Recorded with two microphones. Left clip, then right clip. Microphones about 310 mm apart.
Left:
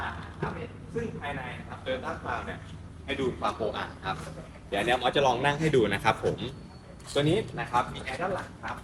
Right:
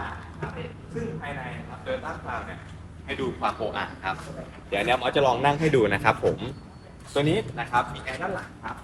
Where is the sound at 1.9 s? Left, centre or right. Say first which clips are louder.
Right 1 dB; centre.